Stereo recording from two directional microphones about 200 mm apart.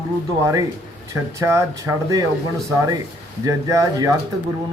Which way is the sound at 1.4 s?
15° right (ahead or behind).